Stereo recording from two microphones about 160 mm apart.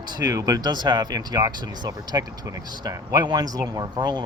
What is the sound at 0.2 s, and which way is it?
Speech, 20° right (ahead or behind).